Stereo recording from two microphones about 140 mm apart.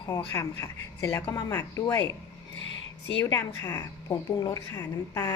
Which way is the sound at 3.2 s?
20° left (ahead or behind).